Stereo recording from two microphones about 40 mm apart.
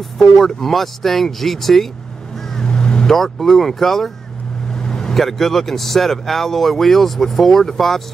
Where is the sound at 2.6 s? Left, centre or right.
Centre.